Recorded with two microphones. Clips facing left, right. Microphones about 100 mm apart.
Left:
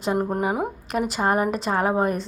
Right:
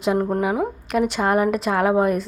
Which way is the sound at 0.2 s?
10° left (ahead or behind).